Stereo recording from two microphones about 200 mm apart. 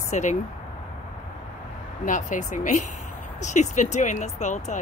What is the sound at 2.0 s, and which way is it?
Speech, 40° left (ahead or behind).